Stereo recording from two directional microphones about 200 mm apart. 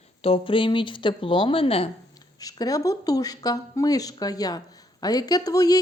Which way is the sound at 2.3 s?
20° left (ahead or behind).